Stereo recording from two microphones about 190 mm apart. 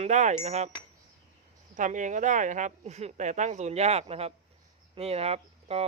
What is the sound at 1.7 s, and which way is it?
Speech, 40° right (ahead or behind).